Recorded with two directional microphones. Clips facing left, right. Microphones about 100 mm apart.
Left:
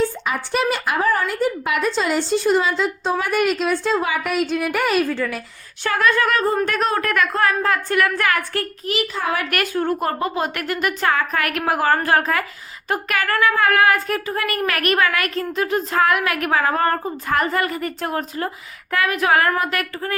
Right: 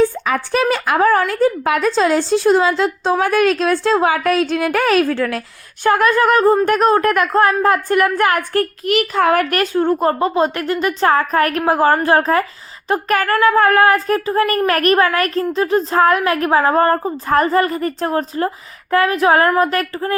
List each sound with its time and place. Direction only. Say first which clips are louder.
1.0 s a woman's voice: right 7 dB; 90° right
2.3 s a woman's voice: right 2 dB; 90° right; by 5.4 s 70° right (ahead or behind)
5.8 s a woman's voice: right 5 dB; 45° right (ahead or behind)
8.8 s a child's voice: right 8 dB; 60° right (ahead or behind)
9.5 s speech: right 5 dB; 30° right (ahead or behind)
11.1 s a woman's voice: right 6 dB; 40° right (ahead or behind)